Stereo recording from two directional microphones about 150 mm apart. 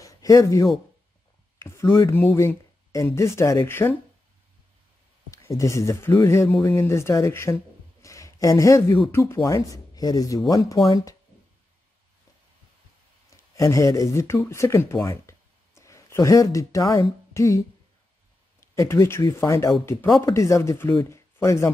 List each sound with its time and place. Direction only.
0.0 s a sound: 20° left (ahead or behind)
1.6 s speech: 15° left (ahead or behind)
5.3 s speech: 20° left (ahead or behind)
13.3 s speech: 20° left (ahead or behind)